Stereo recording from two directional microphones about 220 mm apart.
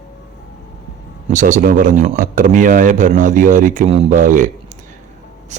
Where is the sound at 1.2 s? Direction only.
35° right (ahead or behind).